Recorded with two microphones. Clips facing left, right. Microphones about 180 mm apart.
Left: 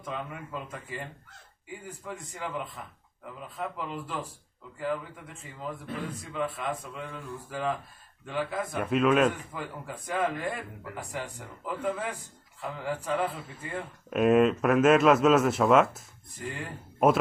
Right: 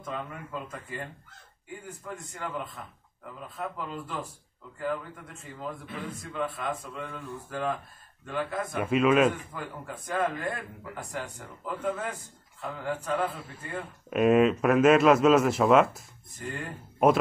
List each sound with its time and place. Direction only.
0.0 s speech: 5° left (ahead or behind)